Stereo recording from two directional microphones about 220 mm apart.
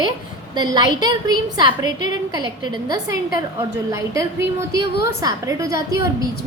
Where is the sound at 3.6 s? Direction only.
15° right (ahead or behind).